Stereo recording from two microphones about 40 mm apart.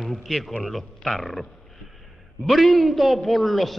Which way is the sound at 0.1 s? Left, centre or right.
Centre.